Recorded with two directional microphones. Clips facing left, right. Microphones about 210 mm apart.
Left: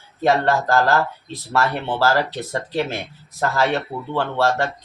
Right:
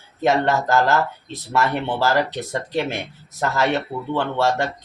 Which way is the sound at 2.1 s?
20° right (ahead or behind).